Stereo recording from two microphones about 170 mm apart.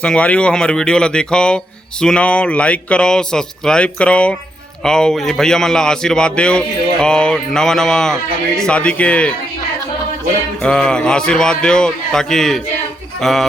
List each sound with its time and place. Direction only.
0.0 s a man's voice: 5° left (ahead or behind)
10.6 s a man's voice: 5° left (ahead or behind)